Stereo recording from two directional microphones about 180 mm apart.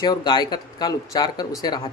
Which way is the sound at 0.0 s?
25° left (ahead or behind).